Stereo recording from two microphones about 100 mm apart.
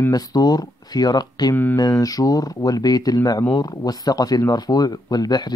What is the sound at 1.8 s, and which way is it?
Speech, 40° left (ahead or behind).